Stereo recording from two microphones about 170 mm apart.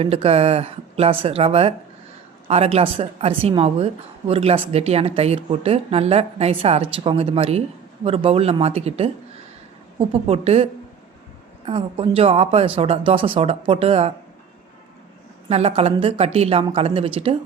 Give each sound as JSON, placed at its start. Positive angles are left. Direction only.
{"t": 0.0, "sound": "speech", "side_deg": -35}
{"t": 15.4, "sound": "speech", "side_deg": -35}